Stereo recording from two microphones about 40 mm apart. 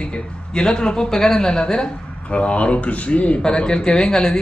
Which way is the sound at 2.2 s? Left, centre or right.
Left.